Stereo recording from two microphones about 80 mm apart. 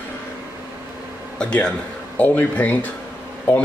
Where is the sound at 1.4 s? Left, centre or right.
Centre.